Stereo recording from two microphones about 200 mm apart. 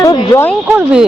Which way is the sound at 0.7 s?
5° right (ahead or behind).